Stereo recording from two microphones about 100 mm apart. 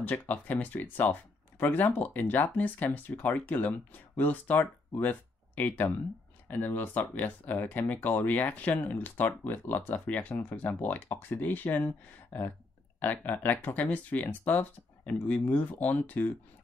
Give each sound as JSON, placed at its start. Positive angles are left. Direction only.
{"t": 0.0, "sound": "speech", "side_deg": 15}